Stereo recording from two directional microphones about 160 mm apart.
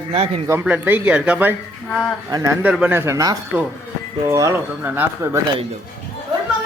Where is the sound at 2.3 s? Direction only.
20° right (ahead or behind).